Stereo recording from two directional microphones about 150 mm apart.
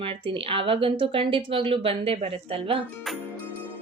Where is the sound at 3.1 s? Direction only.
Centre (ahead or behind).